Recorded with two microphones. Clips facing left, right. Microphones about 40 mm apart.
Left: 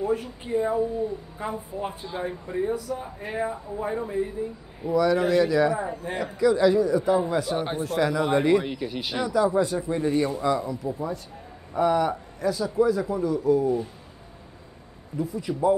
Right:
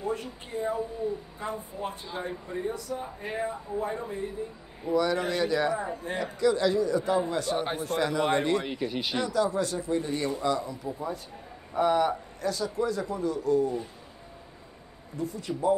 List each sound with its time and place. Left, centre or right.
0.0 s a man's voice: centre
9.3 s a man's voice: centre
10.1 s a man's voice: centre
11.8 s a man's voice: centre
12.1 s a man's voice: centre
15.1 s a man's voice: centre